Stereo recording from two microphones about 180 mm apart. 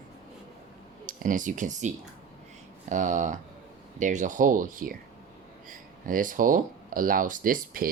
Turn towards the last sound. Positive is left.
turn(degrees=-50)  # may be behind; listen again after turning